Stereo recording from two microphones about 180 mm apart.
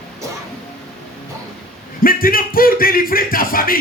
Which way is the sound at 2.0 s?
55° left (ahead or behind).